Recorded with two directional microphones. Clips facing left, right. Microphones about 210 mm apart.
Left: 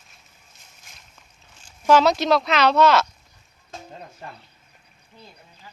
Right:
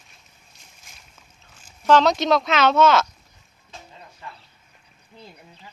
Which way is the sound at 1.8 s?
5° left (ahead or behind).